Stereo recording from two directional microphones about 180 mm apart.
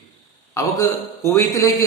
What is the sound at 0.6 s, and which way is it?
A man's voice, 20° left (ahead or behind).